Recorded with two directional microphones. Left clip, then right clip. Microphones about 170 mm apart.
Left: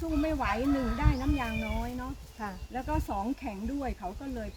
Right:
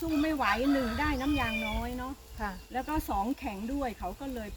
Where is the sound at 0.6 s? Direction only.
25° right (ahead or behind).